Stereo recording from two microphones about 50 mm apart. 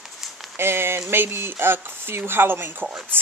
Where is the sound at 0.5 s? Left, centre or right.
Right.